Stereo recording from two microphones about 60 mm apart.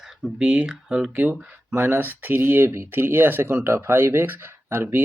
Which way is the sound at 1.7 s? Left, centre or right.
Right.